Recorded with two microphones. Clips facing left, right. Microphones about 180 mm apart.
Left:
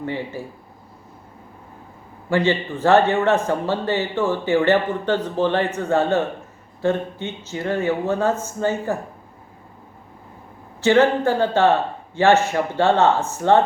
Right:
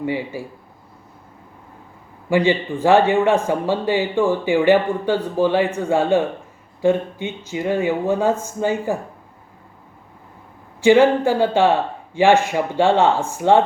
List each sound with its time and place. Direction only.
0.0 s a man's voice: 10° right (ahead or behind)
2.3 s a man's voice: 15° right (ahead or behind)
10.8 s a man's voice: 10° right (ahead or behind)